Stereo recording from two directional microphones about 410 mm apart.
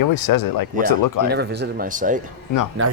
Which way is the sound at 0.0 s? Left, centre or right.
Left.